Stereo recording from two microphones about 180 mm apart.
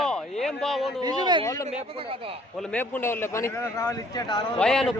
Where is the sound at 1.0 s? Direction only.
25° right (ahead or behind).